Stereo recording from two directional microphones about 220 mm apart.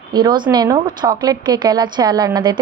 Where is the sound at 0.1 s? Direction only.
20° right (ahead or behind).